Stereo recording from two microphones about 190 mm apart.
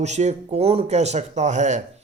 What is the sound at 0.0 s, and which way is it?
Speech, 35° right (ahead or behind).